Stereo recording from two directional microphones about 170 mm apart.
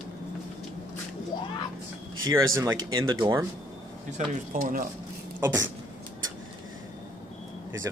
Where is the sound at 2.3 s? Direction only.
15° right (ahead or behind).